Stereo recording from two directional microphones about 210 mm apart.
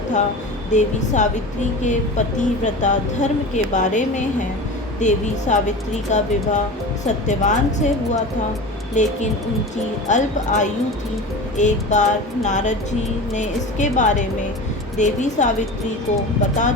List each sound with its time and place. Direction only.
0.7 s a woman's voice: 35° left (ahead or behind)